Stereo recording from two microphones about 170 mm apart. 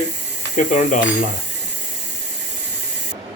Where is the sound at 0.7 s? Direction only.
45° left (ahead or behind).